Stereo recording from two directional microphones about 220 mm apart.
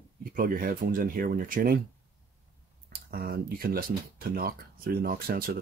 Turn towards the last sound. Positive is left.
turn(degrees=-45)  # may be behind; listen again after turning